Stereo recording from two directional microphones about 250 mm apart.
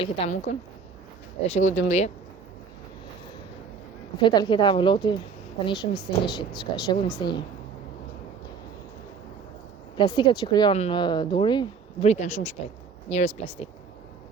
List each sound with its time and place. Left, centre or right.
0.0 s a woman's voice: left
4.2 s a woman's voice: centre
5.9 s a woman's voice: centre
6.6 s a woman's voice: centre
10.0 s a woman's voice: centre